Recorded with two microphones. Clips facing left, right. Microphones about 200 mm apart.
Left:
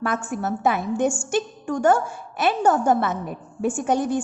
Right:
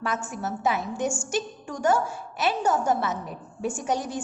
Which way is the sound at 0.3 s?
55° left (ahead or behind).